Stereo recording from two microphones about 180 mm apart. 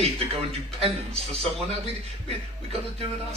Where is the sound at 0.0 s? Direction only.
35° right (ahead or behind).